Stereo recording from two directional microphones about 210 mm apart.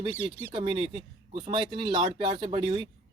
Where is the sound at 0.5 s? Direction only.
25° right (ahead or behind).